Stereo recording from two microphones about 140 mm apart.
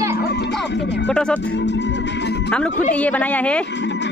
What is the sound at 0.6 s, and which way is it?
Speech, 5° left (ahead or behind).